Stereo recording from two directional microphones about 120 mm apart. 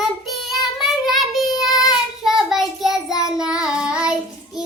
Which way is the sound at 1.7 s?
35° left (ahead or behind).